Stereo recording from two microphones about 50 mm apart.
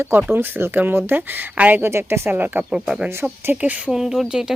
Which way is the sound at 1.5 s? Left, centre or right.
Right.